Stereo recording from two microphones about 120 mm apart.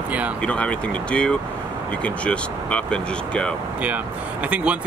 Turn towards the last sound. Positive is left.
turn(degrees=-10)  # may be behind; listen again after turning